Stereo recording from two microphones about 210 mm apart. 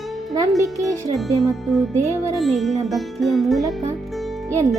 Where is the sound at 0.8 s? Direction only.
15° right (ahead or behind).